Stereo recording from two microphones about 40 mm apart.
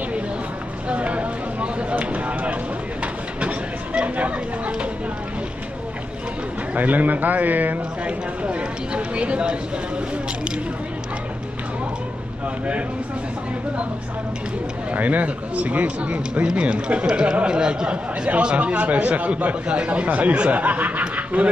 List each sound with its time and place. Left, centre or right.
0.8 s a sound: right
2.0 s speech: right
3.0 s a sound: right
6.7 s a man's voice: right
8.0 s speech: right
14.9 s speech: right
18.6 s a man's voice: right
21.4 s speech: right